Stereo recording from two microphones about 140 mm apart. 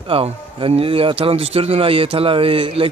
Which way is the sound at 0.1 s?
40° right (ahead or behind).